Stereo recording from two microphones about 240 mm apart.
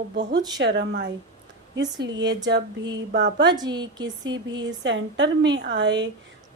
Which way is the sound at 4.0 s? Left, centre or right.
Right.